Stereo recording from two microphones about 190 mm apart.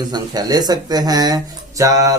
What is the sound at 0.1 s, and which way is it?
Speech, 20° right (ahead or behind).